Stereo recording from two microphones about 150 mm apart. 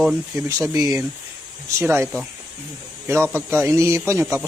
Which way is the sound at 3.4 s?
15° right (ahead or behind).